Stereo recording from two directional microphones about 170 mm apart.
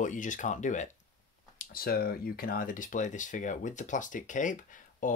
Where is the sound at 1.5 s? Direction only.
60° left (ahead or behind).